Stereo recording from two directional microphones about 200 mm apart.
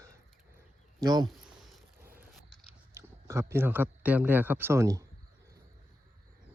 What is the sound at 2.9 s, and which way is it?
Speech, 15° right (ahead or behind).